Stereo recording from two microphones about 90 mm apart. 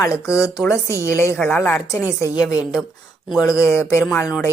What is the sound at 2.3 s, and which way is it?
A woman's voice, 40° left (ahead or behind).